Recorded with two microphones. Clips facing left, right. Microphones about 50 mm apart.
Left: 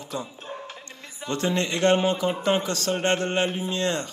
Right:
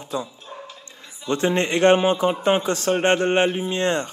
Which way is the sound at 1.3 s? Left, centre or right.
Right.